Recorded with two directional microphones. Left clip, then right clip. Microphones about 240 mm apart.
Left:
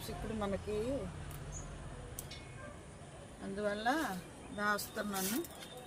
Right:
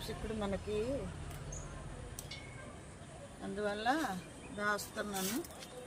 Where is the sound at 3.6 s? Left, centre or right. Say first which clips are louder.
Even; centre.